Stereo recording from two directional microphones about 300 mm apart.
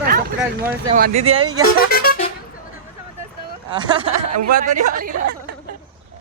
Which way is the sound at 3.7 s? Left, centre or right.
Centre.